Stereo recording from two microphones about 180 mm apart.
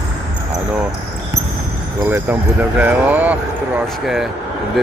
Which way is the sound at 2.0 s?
10° right (ahead or behind).